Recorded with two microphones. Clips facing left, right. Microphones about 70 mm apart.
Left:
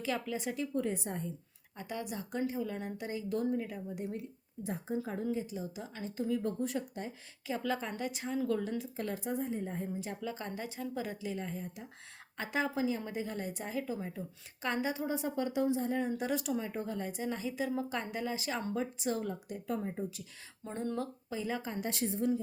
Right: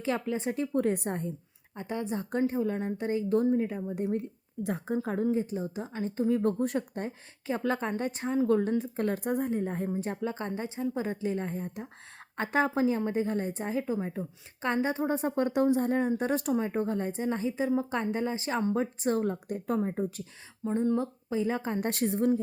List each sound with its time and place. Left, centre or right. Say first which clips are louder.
0.0 s speech: right 5 dB; right
1.7 s a woman's voice: right 6 dB; right
4.6 s speech: right 6 dB; right
5.2 s a woman's voice: right 7 dB; right
6.4 s a woman's voice: right 7 dB; right
16.0 s a woman's voice: right 6 dB; right
20.7 s a woman's voice: right 8 dB; right